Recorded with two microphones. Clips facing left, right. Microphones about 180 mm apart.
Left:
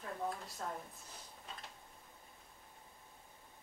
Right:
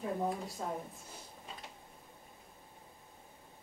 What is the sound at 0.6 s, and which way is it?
Speech, 20° right (ahead or behind).